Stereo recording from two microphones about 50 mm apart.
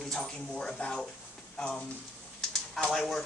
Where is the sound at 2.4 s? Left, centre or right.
Centre.